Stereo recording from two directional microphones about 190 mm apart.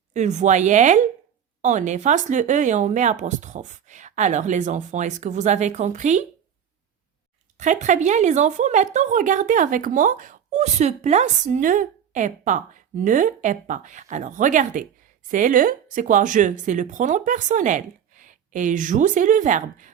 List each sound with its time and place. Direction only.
0.1 s a woman's voice: 40° right (ahead or behind)
7.6 s a woman's voice: 40° right (ahead or behind)